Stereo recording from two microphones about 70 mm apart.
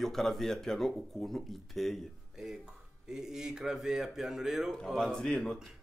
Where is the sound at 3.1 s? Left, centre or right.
Centre.